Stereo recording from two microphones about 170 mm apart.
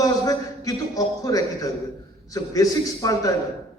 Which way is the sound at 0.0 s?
20° left (ahead or behind).